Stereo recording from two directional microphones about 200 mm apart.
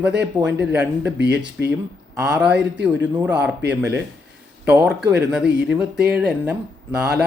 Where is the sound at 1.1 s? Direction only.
55° right (ahead or behind).